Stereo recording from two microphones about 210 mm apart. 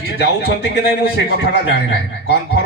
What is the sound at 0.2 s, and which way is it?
A man's voice, 50° left (ahead or behind).